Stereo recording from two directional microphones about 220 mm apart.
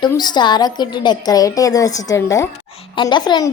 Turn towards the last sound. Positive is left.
turn(degrees=20)  # may be behind; listen again after turning